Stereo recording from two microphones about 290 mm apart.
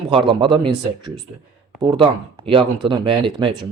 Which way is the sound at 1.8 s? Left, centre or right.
Centre.